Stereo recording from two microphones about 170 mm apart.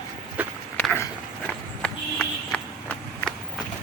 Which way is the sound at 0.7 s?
10° left (ahead or behind).